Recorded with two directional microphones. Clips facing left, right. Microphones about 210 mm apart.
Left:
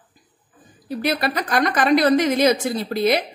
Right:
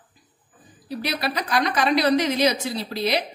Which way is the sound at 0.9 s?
50° left (ahead or behind).